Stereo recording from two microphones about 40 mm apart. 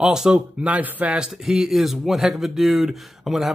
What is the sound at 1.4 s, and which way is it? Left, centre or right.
Speech, centre.